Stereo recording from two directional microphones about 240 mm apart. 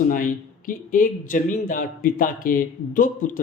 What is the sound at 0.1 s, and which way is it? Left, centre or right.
Speech, left.